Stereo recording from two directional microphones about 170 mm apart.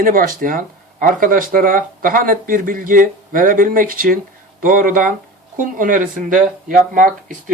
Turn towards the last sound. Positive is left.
turn(degrees=-50)  # may be behind; listen again after turning